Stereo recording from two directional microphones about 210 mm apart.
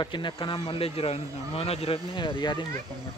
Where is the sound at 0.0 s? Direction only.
25° left (ahead or behind).